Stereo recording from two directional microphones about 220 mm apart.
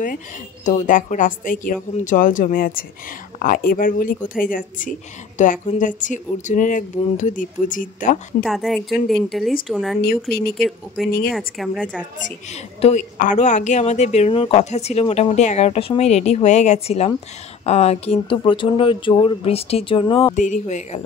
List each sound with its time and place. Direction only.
0.7 s speech: 35° left (ahead or behind)
8.5 s a woman's voice: centre (ahead or behind)
11.2 s a woman's voice: centre (ahead or behind)
12.8 s speech: 35° left (ahead or behind)
20.3 s speech: 35° left (ahead or behind)